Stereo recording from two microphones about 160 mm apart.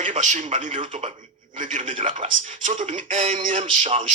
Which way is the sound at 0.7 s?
35° right (ahead or behind).